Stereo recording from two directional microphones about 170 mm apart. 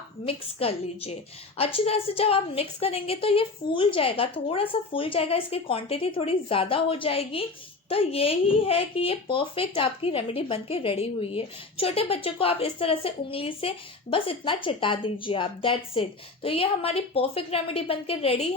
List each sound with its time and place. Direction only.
0.3 s speech: 35° left (ahead or behind)